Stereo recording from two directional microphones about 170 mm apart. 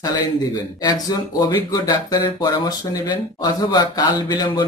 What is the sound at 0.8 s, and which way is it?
Speech, 20° left (ahead or behind).